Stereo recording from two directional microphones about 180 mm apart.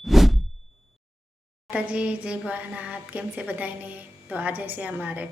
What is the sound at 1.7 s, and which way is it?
Speech, 5° right (ahead or behind).